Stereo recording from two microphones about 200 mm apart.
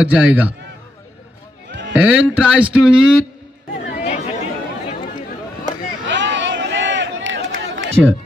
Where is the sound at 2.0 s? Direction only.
5° right (ahead or behind).